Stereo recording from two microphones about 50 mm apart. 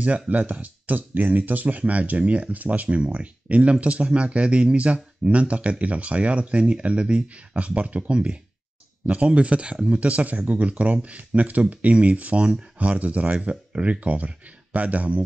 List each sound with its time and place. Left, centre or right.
0.0 s speech: right